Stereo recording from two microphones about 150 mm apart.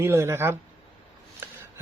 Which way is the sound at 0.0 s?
15° right (ahead or behind).